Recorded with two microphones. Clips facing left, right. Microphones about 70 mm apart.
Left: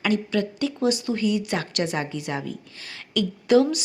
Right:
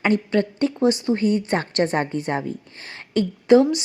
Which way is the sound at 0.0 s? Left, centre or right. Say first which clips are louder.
Right 4 dB; right.